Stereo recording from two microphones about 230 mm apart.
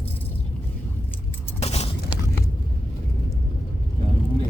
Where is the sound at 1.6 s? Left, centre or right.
Left.